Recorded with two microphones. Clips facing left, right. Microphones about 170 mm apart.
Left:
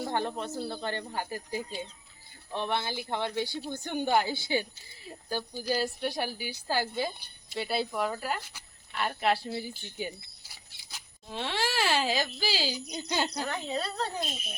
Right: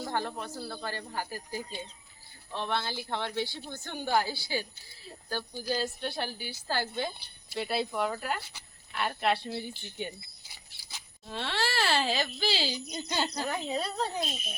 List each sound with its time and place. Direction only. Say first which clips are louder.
0.0 s a woman's voice: left 2 dB; 20° left (ahead or behind)
13.4 s speech: right 1 dB; 10° right (ahead or behind)